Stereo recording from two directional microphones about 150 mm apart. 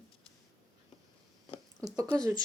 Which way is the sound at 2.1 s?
25° right (ahead or behind).